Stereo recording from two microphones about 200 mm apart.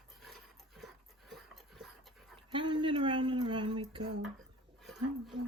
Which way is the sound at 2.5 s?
25° right (ahead or behind).